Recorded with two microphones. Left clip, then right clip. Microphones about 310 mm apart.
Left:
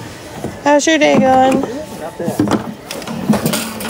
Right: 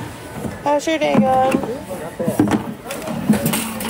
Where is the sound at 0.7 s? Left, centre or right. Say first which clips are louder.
Left 7 dB; left.